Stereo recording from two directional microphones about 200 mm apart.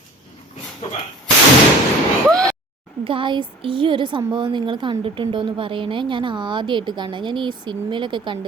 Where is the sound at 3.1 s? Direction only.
25° right (ahead or behind).